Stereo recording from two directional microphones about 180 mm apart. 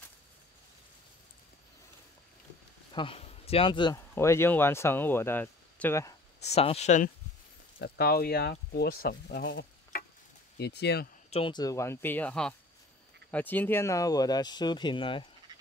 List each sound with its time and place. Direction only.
2.9 s speech: 30° left (ahead or behind)
4.1 s speech: 15° left (ahead or behind)
6.4 s speech: 35° left (ahead or behind)
7.8 s speech: 60° left (ahead or behind)
10.6 s speech: 65° left (ahead or behind)
11.2 s speech: 30° left (ahead or behind)